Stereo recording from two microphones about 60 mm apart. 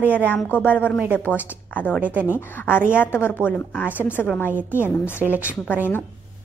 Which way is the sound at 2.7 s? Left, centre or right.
Left.